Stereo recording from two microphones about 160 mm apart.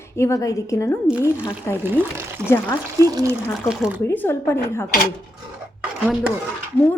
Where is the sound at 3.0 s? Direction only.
25° right (ahead or behind).